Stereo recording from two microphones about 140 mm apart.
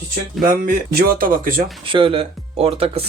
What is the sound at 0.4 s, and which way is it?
Speech, 90° right.